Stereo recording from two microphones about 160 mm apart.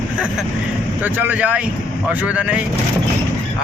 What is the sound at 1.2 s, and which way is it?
Speech, 10° right (ahead or behind).